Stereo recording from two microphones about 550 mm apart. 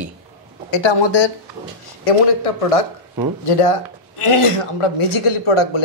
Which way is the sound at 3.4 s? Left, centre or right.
Left.